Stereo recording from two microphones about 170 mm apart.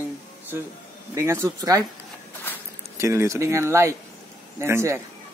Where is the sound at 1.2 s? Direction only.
15° right (ahead or behind).